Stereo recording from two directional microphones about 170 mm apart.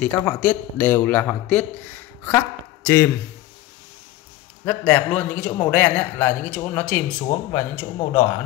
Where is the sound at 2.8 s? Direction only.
10° left (ahead or behind).